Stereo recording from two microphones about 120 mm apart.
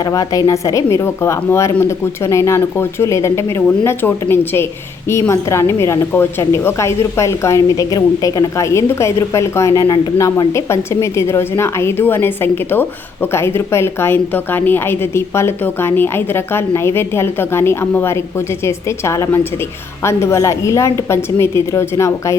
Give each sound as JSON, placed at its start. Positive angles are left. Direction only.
{"t": 0.0, "sound": "a woman's voice", "side_deg": 30}